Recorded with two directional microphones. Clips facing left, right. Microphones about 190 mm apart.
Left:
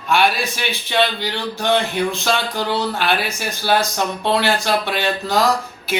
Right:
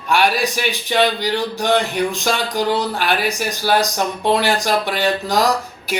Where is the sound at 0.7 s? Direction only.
15° right (ahead or behind).